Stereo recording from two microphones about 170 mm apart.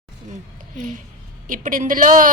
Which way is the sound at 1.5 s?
55° right (ahead or behind).